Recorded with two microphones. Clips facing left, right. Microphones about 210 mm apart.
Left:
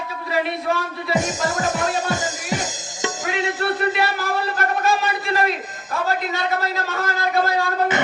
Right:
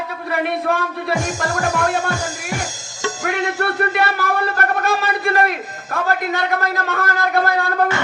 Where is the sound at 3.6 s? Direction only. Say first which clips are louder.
Right 1 dB; 60° right (ahead or behind).